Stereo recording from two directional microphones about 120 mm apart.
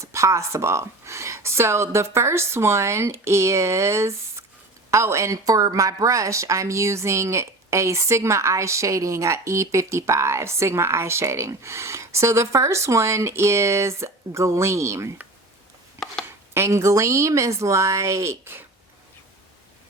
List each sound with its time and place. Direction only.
0.0 s a woman's voice: 25° right (ahead or behind)
16.6 s a woman's voice: 25° right (ahead or behind)